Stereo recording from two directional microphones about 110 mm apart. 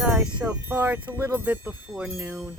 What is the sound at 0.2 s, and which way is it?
Chime, 10° right (ahead or behind).